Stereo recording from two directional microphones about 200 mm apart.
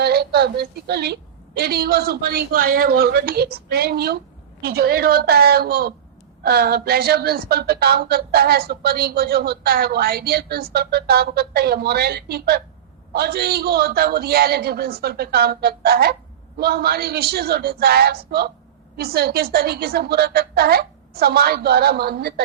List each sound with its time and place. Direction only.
0.0 s speech: 55° right (ahead or behind)